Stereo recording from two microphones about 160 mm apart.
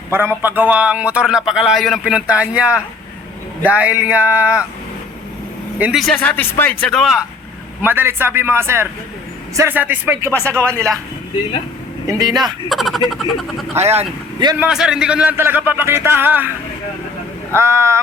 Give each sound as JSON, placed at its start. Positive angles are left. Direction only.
{"t": 0.4, "sound": "speech", "side_deg": -10}
{"t": 5.8, "sound": "speech", "side_deg": 0}
{"t": 6.1, "sound": "speech", "side_deg": 10}
{"t": 7.8, "sound": "speech", "side_deg": -15}
{"t": 10.3, "sound": "speech", "side_deg": 10}
{"t": 12.0, "sound": "speech", "side_deg": -25}
{"t": 12.6, "sound": "speech", "side_deg": 0}
{"t": 13.7, "sound": "speech", "side_deg": -40}
{"t": 14.6, "sound": "speech", "side_deg": -5}
{"t": 17.5, "sound": "speech", "side_deg": -15}